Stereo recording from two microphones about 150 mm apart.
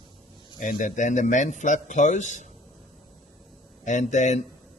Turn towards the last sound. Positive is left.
turn(degrees=55)  # may be behind; listen again after turning